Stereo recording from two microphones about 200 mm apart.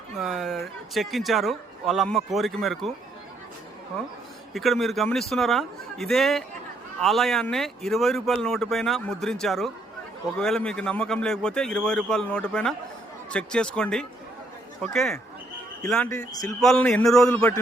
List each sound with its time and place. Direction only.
0.2 s speech: centre (ahead or behind)
4.5 s speech: centre (ahead or behind)
16.1 s a man's voice: 20° left (ahead or behind)
16.5 s speech: 5° left (ahead or behind)